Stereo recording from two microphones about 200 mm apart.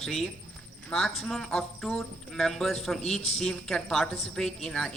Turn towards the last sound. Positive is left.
turn(degrees=5)  # may be behind; listen again after turning